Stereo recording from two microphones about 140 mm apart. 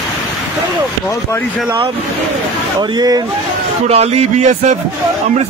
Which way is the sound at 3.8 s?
50° right (ahead or behind).